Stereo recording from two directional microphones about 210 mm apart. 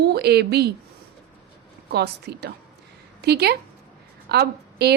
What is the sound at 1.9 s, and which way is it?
A woman's voice, 50° right (ahead or behind).